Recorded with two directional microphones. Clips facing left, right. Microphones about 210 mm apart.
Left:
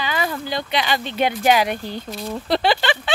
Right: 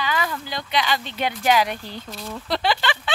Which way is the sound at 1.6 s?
55° left (ahead or behind).